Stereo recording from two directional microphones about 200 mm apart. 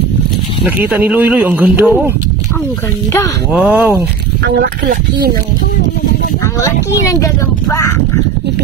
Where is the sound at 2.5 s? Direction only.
10° left (ahead or behind).